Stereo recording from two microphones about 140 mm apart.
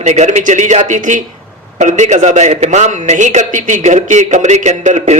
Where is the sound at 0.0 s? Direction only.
55° right (ahead or behind).